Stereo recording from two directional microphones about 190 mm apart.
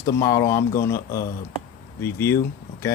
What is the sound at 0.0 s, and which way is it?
Speech, 15° left (ahead or behind).